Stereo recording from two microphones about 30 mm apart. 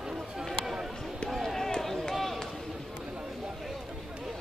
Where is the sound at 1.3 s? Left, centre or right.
Centre.